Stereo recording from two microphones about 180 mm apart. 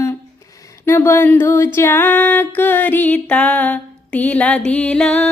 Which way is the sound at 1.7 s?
15° left (ahead or behind).